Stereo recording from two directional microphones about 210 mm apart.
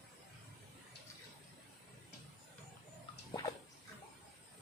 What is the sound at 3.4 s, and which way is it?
Bathtub, 20° left (ahead or behind).